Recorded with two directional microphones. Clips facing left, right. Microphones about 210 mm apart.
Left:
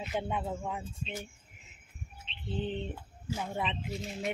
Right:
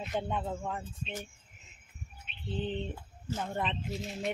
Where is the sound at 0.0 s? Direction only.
5° left (ahead or behind).